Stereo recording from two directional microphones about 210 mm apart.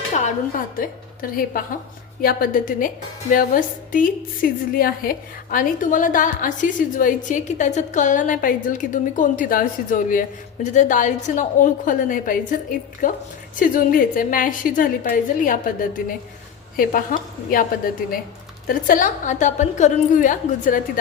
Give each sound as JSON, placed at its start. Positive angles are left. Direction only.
{"t": 0.8, "sound": "a woman's voice", "side_deg": 45}
{"t": 18.7, "sound": "a woman's voice", "side_deg": 40}